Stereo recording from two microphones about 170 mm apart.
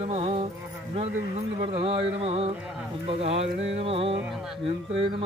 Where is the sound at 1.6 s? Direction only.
35° right (ahead or behind).